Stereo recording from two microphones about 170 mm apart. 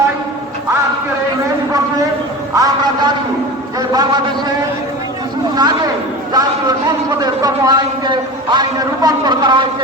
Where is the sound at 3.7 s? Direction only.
25° right (ahead or behind).